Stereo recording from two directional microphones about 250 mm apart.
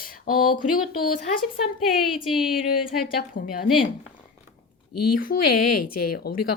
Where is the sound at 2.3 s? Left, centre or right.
Centre.